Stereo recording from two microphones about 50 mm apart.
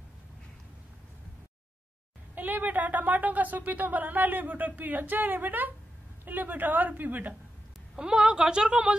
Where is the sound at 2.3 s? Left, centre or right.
Right.